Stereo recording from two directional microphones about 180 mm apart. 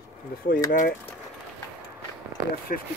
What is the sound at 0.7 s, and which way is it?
Speech, 50° left (ahead or behind).